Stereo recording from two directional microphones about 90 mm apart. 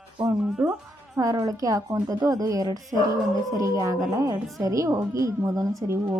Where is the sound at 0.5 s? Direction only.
10° right (ahead or behind).